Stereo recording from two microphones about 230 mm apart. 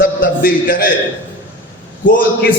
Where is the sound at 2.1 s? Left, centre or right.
Left.